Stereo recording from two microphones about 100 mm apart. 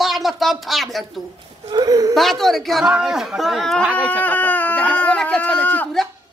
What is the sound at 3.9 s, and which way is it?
Speech, 15° left (ahead or behind).